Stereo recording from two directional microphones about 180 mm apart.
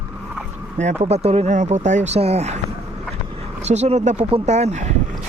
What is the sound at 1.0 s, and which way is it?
Speech, 35° right (ahead or behind).